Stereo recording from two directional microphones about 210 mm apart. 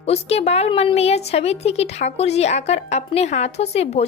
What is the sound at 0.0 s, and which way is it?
A woman's voice, 30° left (ahead or behind).